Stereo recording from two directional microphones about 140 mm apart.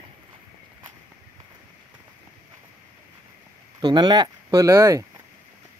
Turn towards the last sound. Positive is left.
turn(degrees=-20)  # may be behind; listen again after turning